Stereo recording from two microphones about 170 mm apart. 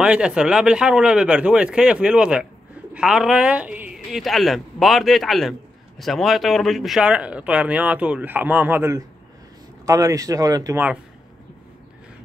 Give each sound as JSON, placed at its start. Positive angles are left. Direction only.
{"t": 0.0, "sound": "a woman's voice", "side_deg": -5}